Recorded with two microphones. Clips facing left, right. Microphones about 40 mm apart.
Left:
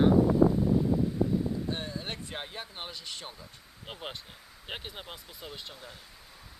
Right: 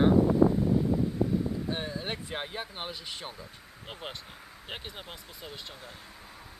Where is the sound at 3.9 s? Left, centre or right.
Centre.